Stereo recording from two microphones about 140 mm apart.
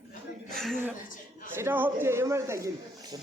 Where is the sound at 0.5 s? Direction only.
5° left (ahead or behind).